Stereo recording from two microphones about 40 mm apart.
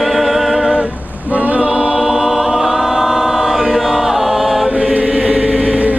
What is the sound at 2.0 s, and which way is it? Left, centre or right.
Choir, centre.